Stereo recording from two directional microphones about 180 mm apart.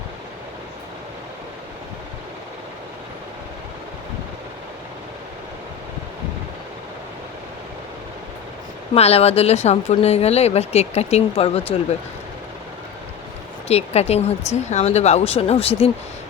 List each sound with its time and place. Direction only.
9.0 s speech: 35° left (ahead or behind)
13.7 s speech: 35° left (ahead or behind)